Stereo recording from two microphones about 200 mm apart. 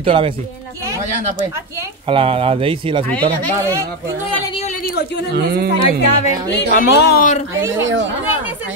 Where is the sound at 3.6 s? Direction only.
15° right (ahead or behind).